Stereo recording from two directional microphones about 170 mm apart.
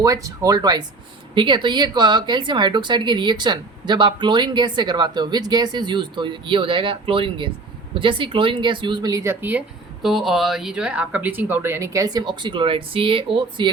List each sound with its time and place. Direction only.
0.0 s speech: 20° right (ahead or behind)